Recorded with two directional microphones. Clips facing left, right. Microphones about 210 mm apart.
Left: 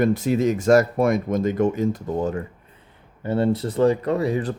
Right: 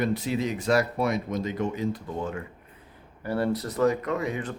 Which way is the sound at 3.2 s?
25° left (ahead or behind).